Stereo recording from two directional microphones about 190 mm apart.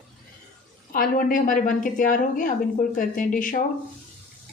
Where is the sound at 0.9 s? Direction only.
45° left (ahead or behind).